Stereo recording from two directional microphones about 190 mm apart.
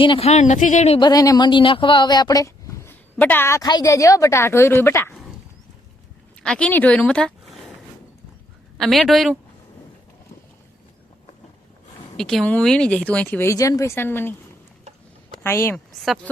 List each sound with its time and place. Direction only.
0.0 s speech: 30° left (ahead or behind)
0.9 s speech: 20° left (ahead or behind)
6.4 s speech: 5° left (ahead or behind)
8.8 s speech: centre (ahead or behind)
12.1 s speech: 5° left (ahead or behind)
15.4 s speech: 15° left (ahead or behind)